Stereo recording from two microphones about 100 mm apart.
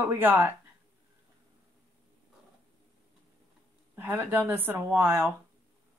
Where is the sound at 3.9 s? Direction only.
20° right (ahead or behind).